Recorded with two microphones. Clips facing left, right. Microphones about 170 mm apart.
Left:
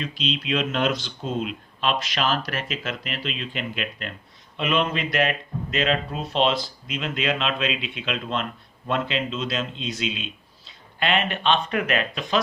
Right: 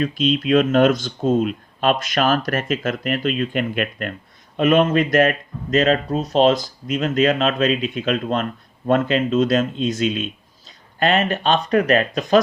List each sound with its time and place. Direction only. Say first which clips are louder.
0.0 s speech: right 9 dB; 50° right (ahead or behind)